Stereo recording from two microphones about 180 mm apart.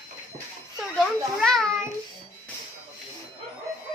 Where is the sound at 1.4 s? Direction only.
5° left (ahead or behind).